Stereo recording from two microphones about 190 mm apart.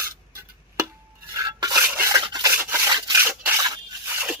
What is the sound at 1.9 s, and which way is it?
Rub, 15° right (ahead or behind).